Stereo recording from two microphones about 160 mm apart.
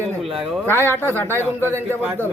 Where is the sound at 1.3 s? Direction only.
15° right (ahead or behind).